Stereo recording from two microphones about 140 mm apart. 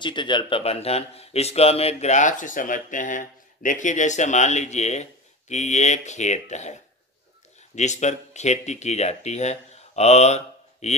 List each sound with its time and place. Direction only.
0.0 s speech: 35° left (ahead or behind); by 11.0 s 55° left (ahead or behind)